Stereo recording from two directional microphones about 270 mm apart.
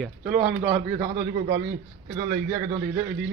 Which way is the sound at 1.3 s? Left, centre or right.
Right.